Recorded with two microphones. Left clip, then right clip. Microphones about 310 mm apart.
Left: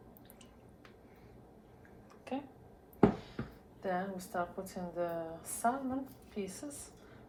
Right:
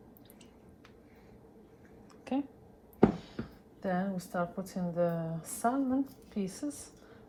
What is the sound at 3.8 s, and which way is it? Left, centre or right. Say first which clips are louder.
A woman's voice: right 2 dB; right.